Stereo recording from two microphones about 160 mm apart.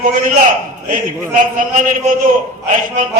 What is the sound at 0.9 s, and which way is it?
A man's voice, 55° right (ahead or behind).